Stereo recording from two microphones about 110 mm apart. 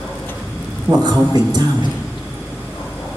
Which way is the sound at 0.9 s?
40° right (ahead or behind).